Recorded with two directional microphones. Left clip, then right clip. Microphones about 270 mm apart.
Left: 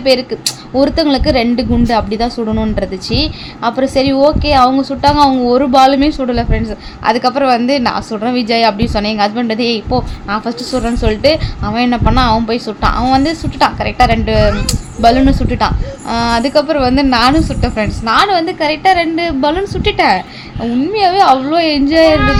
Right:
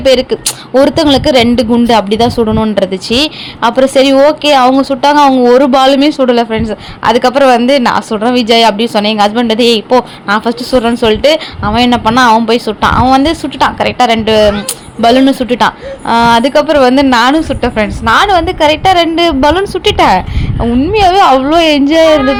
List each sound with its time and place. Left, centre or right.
0.0 s a woman's voice: centre